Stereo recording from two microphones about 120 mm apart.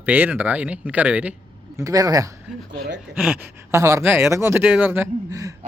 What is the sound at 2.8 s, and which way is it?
Speech, 5° right (ahead or behind).